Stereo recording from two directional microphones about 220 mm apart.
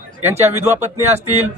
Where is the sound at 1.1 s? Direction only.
30° right (ahead or behind).